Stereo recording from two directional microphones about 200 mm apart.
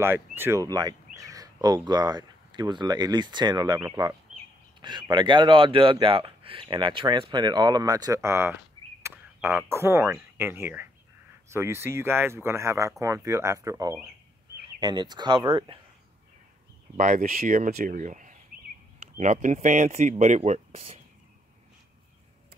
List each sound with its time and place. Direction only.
0.0 s a man's voice: 10° right (ahead or behind)
16.9 s speech: 40° right (ahead or behind)